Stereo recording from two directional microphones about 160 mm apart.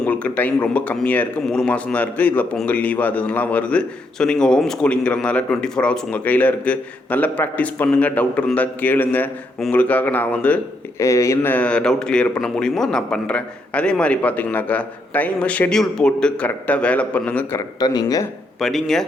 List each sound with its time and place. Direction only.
0.0 s speech: 10° left (ahead or behind)
17.6 s speech: 25° left (ahead or behind)
18.6 s speech: centre (ahead or behind)